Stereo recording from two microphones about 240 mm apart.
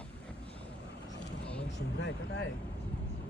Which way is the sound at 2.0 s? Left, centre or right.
Left.